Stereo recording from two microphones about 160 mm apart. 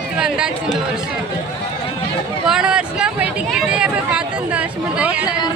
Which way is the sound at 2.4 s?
5° right (ahead or behind).